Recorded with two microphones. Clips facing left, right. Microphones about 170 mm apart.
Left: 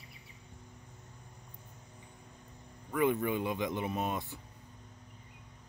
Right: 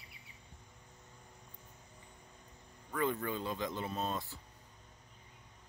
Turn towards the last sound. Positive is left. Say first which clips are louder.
# left 3 dB
turn(degrees=15)  # may be behind; listen again after turning